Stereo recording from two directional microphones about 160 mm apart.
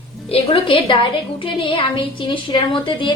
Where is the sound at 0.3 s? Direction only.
35° left (ahead or behind).